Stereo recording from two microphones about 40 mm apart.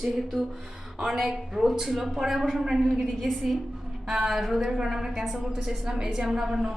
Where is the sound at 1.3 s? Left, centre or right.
Centre.